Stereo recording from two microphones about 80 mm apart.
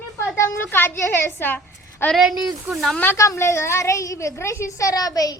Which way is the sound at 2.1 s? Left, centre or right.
Centre.